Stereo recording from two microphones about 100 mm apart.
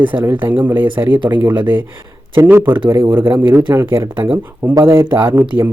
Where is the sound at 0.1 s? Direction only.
20° right (ahead or behind).